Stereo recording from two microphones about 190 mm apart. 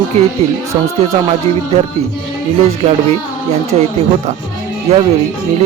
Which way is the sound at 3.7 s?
30° right (ahead or behind).